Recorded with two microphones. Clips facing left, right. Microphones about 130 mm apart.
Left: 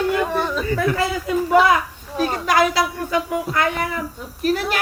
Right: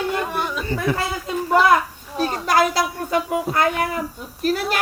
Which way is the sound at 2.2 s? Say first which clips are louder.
Left 1 dB; 40° right (ahead or behind).